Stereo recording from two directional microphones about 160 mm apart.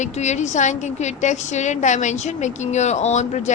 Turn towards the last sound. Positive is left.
turn(degrees=45)  # may be behind; listen again after turning